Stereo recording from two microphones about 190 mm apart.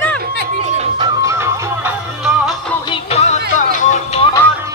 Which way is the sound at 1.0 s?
15° right (ahead or behind).